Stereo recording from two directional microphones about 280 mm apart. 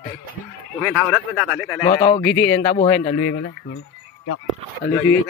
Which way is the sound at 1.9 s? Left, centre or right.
Centre.